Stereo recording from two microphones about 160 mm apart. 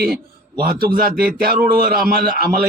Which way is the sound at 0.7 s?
65° right (ahead or behind).